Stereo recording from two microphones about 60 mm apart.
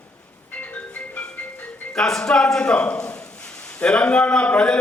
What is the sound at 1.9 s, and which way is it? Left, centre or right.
A man's voice, centre.